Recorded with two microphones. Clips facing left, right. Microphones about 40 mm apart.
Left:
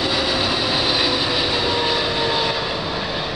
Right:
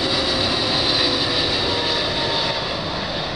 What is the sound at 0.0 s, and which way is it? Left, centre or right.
Train, centre.